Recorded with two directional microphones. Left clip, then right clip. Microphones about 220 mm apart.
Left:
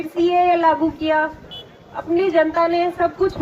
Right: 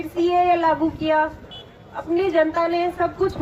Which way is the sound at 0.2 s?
25° right (ahead or behind).